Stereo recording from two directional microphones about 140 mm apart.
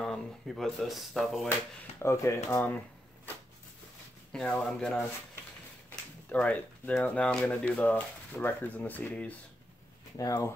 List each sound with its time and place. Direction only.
0.0 s speech: 5° left (ahead or behind)
2.0 s speech: 20° left (ahead or behind)
4.3 s speech: 5° left (ahead or behind)
10.1 s speech: 25° left (ahead or behind)